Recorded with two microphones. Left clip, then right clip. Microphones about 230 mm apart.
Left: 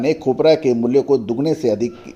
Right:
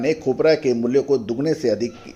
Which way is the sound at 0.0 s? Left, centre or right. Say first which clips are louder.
Left 3 dB; left.